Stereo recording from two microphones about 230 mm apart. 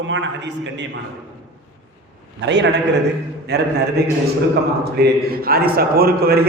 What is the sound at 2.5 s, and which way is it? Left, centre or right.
A man's voice, right.